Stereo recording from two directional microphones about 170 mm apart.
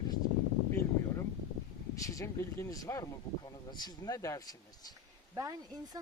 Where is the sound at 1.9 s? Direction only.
20° left (ahead or behind).